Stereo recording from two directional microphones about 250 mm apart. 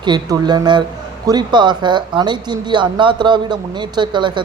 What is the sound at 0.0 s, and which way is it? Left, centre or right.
Speech, centre.